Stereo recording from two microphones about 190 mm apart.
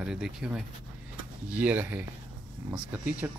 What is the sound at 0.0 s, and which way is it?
Speech, 5° right (ahead or behind).